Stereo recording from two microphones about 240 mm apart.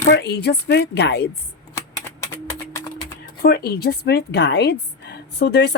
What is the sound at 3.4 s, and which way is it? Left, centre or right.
A woman's voice, left.